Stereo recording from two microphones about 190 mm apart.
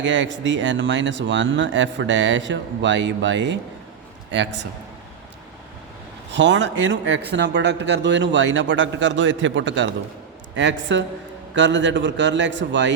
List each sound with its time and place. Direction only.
0.0 s speech: 75° right (ahead or behind)
6.3 s speech: 70° right (ahead or behind)